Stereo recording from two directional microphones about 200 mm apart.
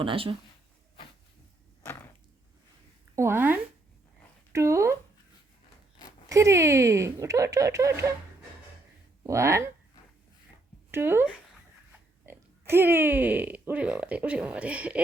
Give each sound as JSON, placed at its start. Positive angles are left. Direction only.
{"t": 0.0, "sound": "speech", "side_deg": -25}
{"t": 3.2, "sound": "speech", "side_deg": -10}
{"t": 6.2, "sound": "speech", "side_deg": -15}
{"t": 9.2, "sound": "speech", "side_deg": -15}
{"t": 10.9, "sound": "speech", "side_deg": -10}